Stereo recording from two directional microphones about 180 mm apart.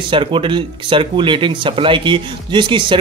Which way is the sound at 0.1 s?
30° right (ahead or behind).